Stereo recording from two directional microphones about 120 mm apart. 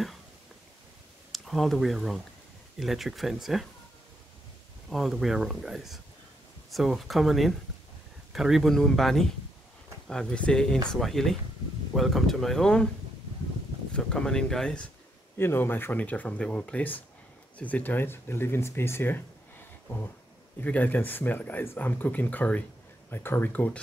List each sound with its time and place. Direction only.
1.3 s speech: centre (ahead or behind)
4.8 s speech: centre (ahead or behind)
13.9 s speech: 5° left (ahead or behind)
15.3 s speech: 20° left (ahead or behind)
20.6 s speech: 15° left (ahead or behind)